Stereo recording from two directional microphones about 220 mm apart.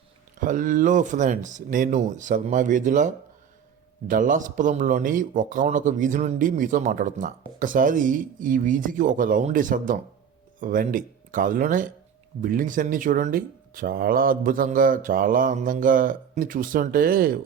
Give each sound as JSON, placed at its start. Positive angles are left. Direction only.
{"t": 0.3, "sound": "speech", "side_deg": -35}
{"t": 4.1, "sound": "speech", "side_deg": -35}